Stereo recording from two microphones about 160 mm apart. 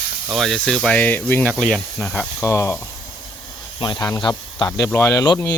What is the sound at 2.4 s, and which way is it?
Speech, 15° left (ahead or behind).